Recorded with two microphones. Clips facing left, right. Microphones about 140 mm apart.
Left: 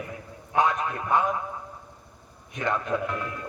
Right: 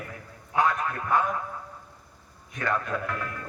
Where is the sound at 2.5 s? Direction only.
20° left (ahead or behind).